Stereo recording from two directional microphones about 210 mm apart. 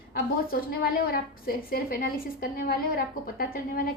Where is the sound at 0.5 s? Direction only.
45° left (ahead or behind).